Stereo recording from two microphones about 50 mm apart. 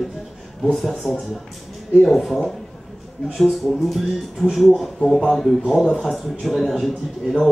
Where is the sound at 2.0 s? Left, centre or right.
Centre.